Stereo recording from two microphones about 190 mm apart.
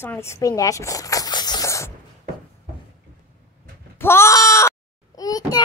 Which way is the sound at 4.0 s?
15° left (ahead or behind).